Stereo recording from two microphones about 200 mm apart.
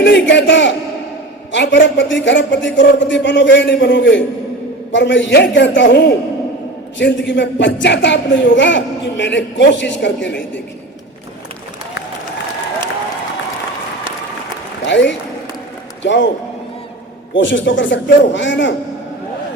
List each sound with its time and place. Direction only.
0.0 s a woman's voice: 60° left (ahead or behind)
14.8 s a man's voice: 60° left (ahead or behind)
17.3 s a woman's voice: 65° left (ahead or behind)